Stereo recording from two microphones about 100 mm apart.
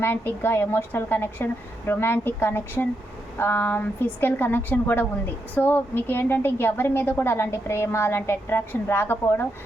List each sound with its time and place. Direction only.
0.0 s a woman's voice: 20° left (ahead or behind)